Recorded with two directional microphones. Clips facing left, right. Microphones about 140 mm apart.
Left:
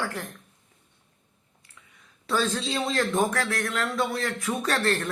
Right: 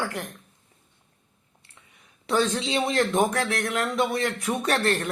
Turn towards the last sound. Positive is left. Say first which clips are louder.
# right 1 dB
turn(degrees=-20)  # may be behind; listen again after turning